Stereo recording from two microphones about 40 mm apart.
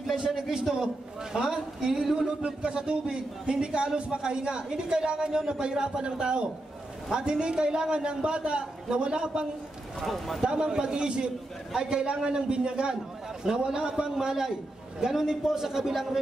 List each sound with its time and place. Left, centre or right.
0.4 s a man's voice: centre
9.9 s speech: centre
10.4 s a man's voice: right; by 16.2 s centre